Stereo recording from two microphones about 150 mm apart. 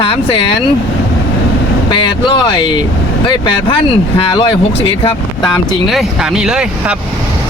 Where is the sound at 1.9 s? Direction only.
30° left (ahead or behind).